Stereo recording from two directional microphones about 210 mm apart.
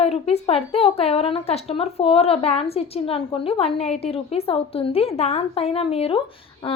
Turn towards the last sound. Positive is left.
turn(degrees=25)  # may be behind; listen again after turning